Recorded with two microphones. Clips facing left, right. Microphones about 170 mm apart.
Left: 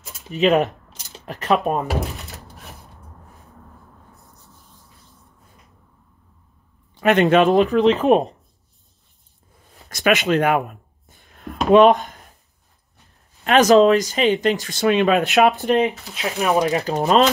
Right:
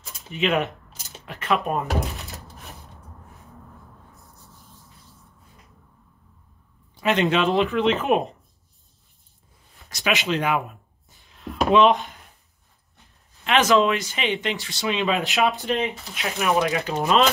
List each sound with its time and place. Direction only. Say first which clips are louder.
0.3 s speech: left 6 dB; 40° left (ahead or behind)
1.9 s speech: left 2 dB; centre (ahead or behind)
7.0 s speech: left 6 dB; 55° left (ahead or behind); by 8.4 s 35° left (ahead or behind)
9.8 s a sound: left 6 dB; 55° left (ahead or behind)
11.7 s speech: left 6 dB; 40° left (ahead or behind)
13.4 s speech: left 6 dB; 40° left (ahead or behind)
15.1 s speech: left 7 dB; 65° left (ahead or behind)
15.6 s speech: left 7 dB; 40° left (ahead or behind)